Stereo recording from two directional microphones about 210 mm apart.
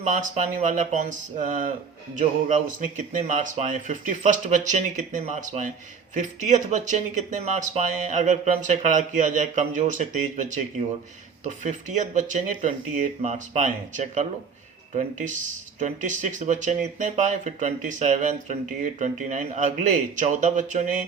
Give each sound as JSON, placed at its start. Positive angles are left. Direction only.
{"t": 0.0, "sound": "speech", "side_deg": -35}